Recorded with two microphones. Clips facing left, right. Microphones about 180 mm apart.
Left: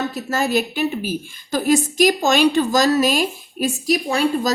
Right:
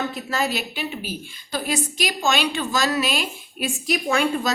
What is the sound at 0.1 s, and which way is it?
A woman's voice, 45° left (ahead or behind).